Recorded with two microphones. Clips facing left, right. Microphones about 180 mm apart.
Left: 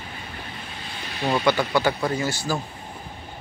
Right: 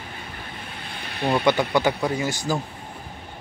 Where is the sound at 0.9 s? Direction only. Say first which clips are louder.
Right 1 dB; 60° right (ahead or behind).